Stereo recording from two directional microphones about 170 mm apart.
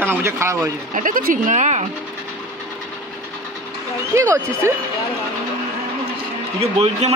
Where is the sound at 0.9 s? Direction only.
55° right (ahead or behind).